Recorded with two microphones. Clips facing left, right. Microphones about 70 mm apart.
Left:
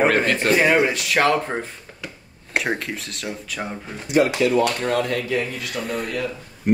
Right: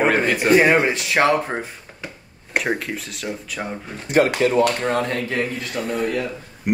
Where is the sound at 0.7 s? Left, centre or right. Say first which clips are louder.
Right 1 dB; right.